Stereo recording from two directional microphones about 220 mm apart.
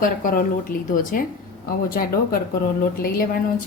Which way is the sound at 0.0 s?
40° left (ahead or behind).